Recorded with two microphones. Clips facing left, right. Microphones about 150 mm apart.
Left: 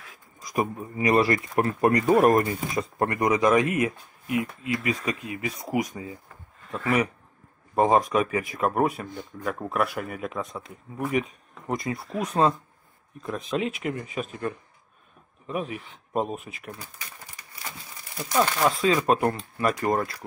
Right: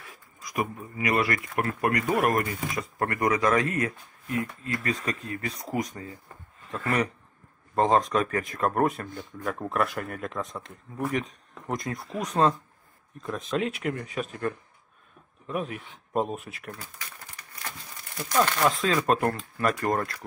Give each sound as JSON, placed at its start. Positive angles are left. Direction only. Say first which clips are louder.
{"t": 0.4, "sound": "speech", "louder": "left 3 dB", "side_deg": 30}